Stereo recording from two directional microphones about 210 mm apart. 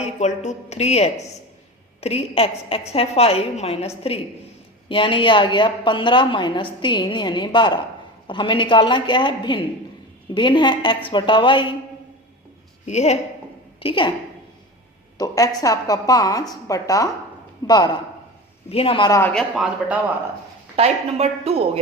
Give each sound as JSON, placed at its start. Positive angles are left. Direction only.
{"t": 0.0, "sound": "a woman's voice", "side_deg": 35}
{"t": 12.8, "sound": "a woman's voice", "side_deg": 30}
{"t": 15.2, "sound": "a woman's voice", "side_deg": 15}
{"t": 19.3, "sound": "a man's voice", "side_deg": 0}
{"t": 20.7, "sound": "speech", "side_deg": -30}